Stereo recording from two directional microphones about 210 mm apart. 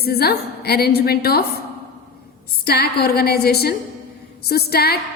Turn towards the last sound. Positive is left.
turn(degrees=50)  # may be behind; listen again after turning